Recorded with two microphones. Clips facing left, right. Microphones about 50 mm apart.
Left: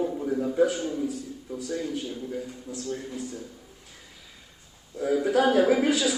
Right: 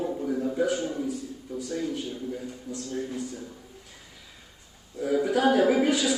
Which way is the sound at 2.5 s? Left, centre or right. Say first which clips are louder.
Even; centre.